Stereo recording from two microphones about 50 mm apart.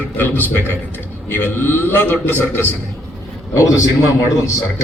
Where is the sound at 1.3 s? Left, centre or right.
Left.